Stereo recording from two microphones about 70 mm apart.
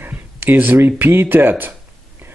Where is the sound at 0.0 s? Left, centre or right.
Right.